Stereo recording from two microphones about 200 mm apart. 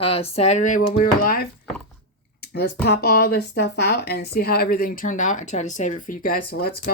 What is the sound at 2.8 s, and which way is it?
Speech, 55° left (ahead or behind).